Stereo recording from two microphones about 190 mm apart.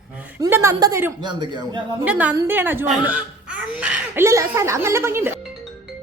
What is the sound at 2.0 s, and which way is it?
A woman's voice, 10° right (ahead or behind).